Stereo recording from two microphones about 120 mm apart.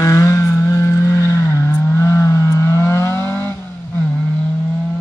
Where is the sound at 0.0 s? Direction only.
25° left (ahead or behind).